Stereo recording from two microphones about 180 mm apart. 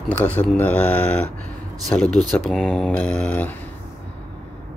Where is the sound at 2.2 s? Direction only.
Centre (ahead or behind).